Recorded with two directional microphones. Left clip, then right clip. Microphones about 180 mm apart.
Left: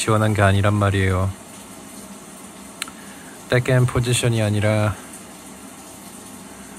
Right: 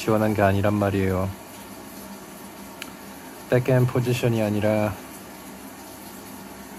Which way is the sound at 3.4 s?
20° left (ahead or behind).